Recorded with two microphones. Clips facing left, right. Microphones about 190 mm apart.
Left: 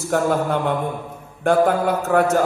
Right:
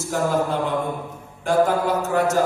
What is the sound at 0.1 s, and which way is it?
Speech, 60° left (ahead or behind).